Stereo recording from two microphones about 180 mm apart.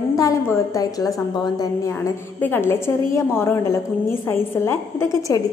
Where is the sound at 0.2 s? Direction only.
15° left (ahead or behind).